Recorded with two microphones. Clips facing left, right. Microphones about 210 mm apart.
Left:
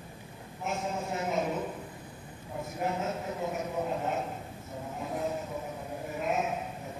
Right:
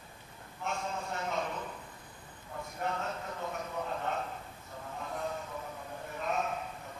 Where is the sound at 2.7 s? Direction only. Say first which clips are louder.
Left 4 dB; 15° left (ahead or behind).